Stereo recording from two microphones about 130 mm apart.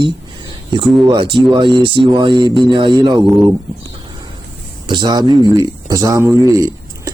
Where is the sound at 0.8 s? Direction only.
Centre (ahead or behind).